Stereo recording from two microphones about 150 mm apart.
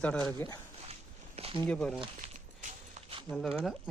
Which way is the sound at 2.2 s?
55° right (ahead or behind).